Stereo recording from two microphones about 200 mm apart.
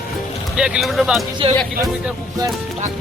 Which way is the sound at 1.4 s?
30° right (ahead or behind).